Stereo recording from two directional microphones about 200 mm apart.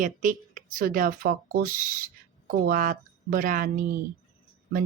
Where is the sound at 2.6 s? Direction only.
45° right (ahead or behind).